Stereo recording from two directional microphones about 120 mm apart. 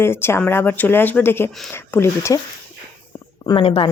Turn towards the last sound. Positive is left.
turn(degrees=50)  # may be behind; listen again after turning